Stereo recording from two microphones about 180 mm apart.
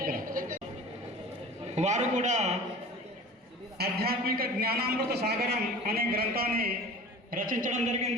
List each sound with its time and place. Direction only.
0.0 s a sound: 50° right (ahead or behind)
1.7 s a man's voice: 40° right (ahead or behind)
3.8 s a man's voice: 60° right (ahead or behind); by 8.1 s 40° right (ahead or behind)